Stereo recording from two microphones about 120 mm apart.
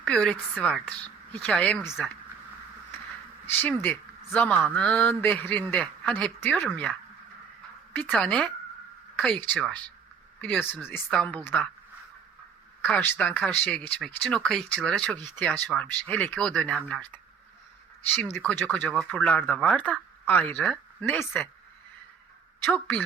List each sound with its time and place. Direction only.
0.1 s speech: 5° left (ahead or behind)
1.9 s speech: 5° right (ahead or behind)
3.4 s speech: 15° left (ahead or behind)
8.2 s speech: 10° left (ahead or behind)
13.0 s speech: 15° left (ahead or behind)
18.1 s speech: 15° left (ahead or behind)
22.6 s speech: 15° left (ahead or behind)